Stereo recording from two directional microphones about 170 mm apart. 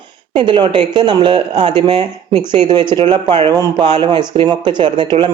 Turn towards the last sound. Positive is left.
turn(degrees=-25)  # may be behind; listen again after turning